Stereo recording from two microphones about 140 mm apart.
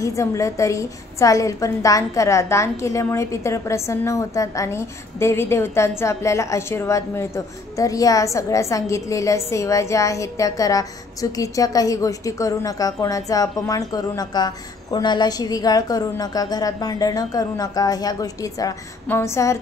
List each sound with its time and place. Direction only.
0.0 s a woman's voice: 20° left (ahead or behind)